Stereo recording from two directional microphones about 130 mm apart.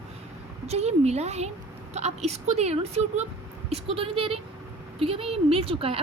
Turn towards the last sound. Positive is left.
turn(degrees=-45)  # may be behind; listen again after turning